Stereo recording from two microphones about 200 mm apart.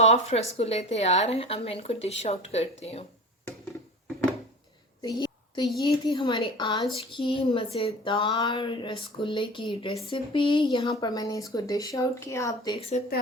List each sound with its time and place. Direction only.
0.0 s speech: 30° left (ahead or behind)
5.0 s a sound: 20° left (ahead or behind)
11.0 s speech: 20° left (ahead or behind)